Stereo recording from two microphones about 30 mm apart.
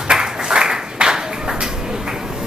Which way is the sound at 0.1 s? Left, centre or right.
Right.